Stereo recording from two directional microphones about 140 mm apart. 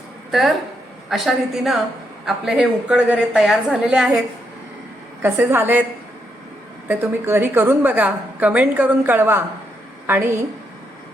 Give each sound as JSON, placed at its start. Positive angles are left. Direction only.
{"t": 0.3, "sound": "a woman's voice", "side_deg": 0}
{"t": 5.2, "sound": "a woman's voice", "side_deg": -15}
{"t": 6.8, "sound": "a woman's voice", "side_deg": -15}